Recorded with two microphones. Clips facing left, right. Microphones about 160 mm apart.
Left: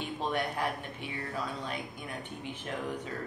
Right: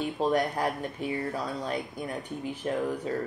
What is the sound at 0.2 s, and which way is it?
Speech, 40° right (ahead or behind).